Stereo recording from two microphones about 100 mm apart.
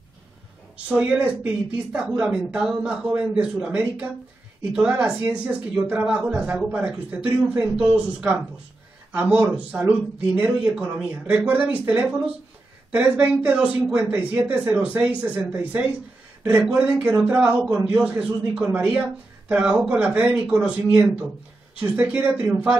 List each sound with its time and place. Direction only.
0.8 s speech: 15° right (ahead or behind)